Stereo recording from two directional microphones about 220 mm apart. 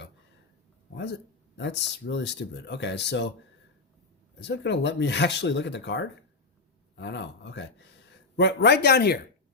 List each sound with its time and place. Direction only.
1.5 s speech: 50° left (ahead or behind)
4.4 s speech: 50° left (ahead or behind)